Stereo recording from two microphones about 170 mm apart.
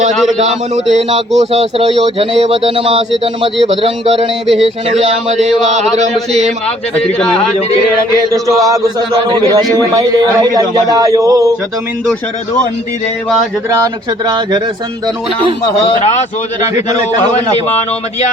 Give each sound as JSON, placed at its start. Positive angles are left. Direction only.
{"t": 0.1, "sound": "a man's voice", "side_deg": 0}
{"t": 1.4, "sound": "speech", "side_deg": -35}
{"t": 7.0, "sound": "a man's voice", "side_deg": 5}
{"t": 8.3, "sound": "speech", "side_deg": -20}
{"t": 13.7, "sound": "speech", "side_deg": -20}